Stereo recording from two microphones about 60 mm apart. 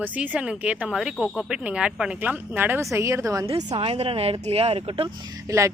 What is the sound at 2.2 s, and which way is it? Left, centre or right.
Speech, right.